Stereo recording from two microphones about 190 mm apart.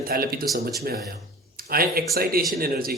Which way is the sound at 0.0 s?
50° right (ahead or behind).